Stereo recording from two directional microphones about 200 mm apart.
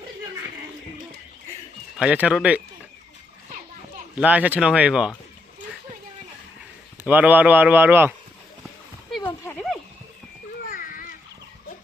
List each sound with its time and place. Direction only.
2.0 s speech: 5° right (ahead or behind)
4.2 s speech: 5° right (ahead or behind)
7.0 s speech: 5° right (ahead or behind)
10.7 s a sound: 45° left (ahead or behind)